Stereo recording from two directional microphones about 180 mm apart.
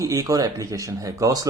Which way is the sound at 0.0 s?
20° right (ahead or behind).